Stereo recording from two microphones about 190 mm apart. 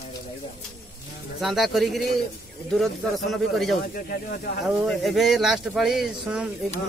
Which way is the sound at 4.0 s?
50° left (ahead or behind).